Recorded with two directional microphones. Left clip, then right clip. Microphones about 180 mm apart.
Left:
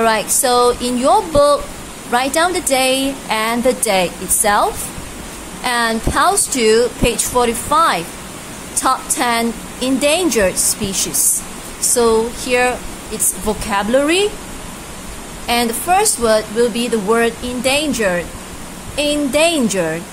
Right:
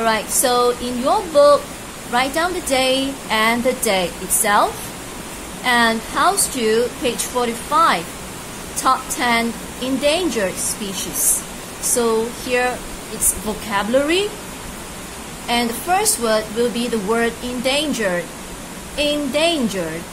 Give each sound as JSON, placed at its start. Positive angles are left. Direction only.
{"t": 0.0, "sound": "a woman's voice", "side_deg": 25}
{"t": 11.9, "sound": "a woman's voice", "side_deg": 20}
{"t": 15.4, "sound": "a woman's voice", "side_deg": 20}